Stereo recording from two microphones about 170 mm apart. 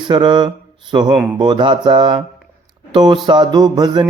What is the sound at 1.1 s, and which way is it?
Speech, 10° right (ahead or behind).